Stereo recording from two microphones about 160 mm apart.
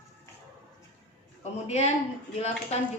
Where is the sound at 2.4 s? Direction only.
40° left (ahead or behind).